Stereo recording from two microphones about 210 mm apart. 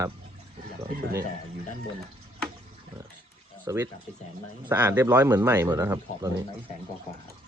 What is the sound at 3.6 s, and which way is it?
Speech, 15° right (ahead or behind).